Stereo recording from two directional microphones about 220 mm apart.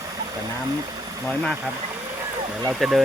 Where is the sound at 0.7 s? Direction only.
20° right (ahead or behind).